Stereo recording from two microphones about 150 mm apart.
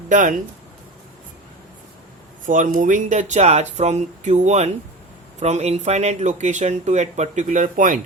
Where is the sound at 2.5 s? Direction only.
60° right (ahead or behind).